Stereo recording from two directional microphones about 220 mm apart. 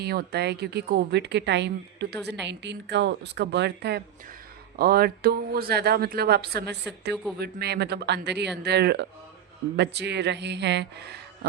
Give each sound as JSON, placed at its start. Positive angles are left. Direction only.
{"t": 0.0, "sound": "a woman's voice", "side_deg": -45}